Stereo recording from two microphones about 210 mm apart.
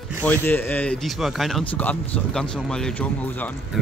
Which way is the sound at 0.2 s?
10° left (ahead or behind).